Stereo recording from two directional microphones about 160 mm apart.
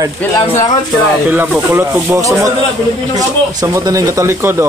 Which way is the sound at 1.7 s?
20° right (ahead or behind).